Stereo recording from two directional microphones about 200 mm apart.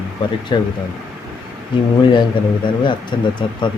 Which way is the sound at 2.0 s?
25° left (ahead or behind).